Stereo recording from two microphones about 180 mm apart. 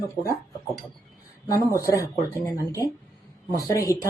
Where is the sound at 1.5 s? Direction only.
20° left (ahead or behind).